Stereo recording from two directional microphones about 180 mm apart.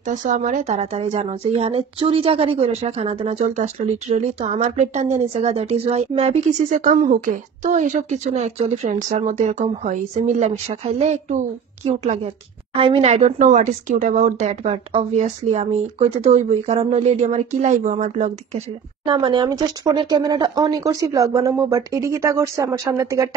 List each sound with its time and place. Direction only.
0.1 s a woman's voice: 45° right (ahead or behind)
19.0 s speech: 25° right (ahead or behind)